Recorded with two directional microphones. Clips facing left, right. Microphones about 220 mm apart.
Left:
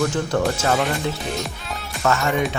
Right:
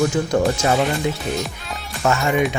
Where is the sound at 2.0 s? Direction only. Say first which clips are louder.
Right 1 dB; 15° right (ahead or behind).